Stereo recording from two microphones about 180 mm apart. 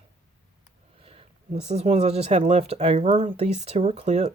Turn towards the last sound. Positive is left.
turn(degrees=-40)  # may be behind; listen again after turning